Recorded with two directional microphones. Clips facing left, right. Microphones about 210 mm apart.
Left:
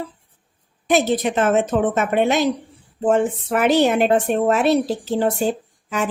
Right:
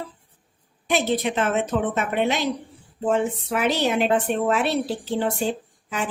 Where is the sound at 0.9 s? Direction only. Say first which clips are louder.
Left 4 dB; 45° left (ahead or behind).